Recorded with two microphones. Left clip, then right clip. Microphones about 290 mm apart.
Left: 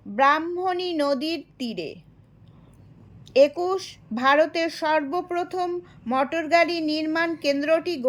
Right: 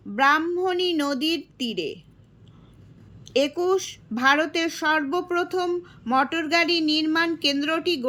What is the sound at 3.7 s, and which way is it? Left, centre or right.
A woman's voice, centre.